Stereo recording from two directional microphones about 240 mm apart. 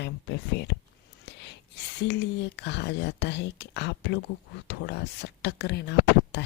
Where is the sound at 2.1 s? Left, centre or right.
Left.